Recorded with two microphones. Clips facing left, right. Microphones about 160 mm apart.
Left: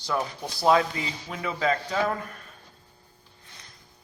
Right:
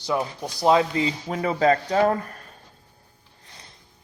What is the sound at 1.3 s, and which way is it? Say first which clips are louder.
Speech: right 6 dB; 40° right (ahead or behind).